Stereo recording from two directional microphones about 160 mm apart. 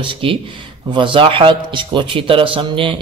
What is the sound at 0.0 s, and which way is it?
Speech, 30° right (ahead or behind).